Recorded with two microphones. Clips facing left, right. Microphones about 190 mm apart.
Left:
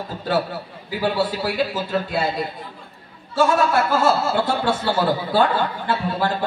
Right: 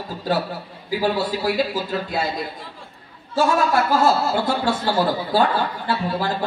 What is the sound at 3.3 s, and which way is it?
A man's voice, 40° right (ahead or behind).